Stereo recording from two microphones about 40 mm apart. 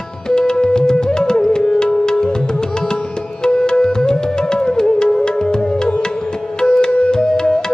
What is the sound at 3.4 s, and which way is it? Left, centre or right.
Music, left.